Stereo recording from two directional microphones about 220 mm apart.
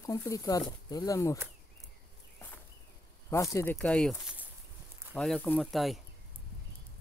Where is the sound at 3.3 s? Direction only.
15° left (ahead or behind).